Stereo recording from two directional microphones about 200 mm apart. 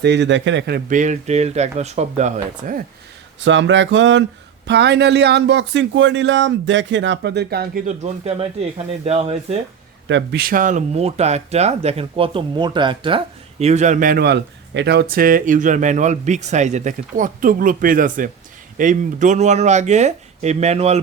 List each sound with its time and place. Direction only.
0.0 s speech: 60° right (ahead or behind)
0.9 s speech: 40° right (ahead or behind)
3.4 s speech: 65° right (ahead or behind)
7.9 s speech: 35° right (ahead or behind)
10.1 s speech: 55° right (ahead or behind); by 21.0 s 30° right (ahead or behind)